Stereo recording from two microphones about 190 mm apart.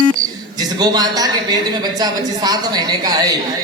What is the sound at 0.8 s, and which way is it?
Speech, 20° right (ahead or behind).